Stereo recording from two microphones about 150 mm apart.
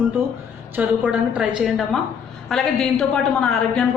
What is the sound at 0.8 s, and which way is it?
A woman's voice, 10° right (ahead or behind).